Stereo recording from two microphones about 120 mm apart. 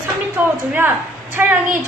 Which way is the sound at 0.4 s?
15° right (ahead or behind).